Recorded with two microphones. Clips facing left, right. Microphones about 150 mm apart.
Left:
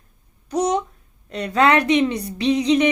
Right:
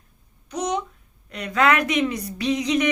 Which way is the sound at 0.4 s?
40° left (ahead or behind).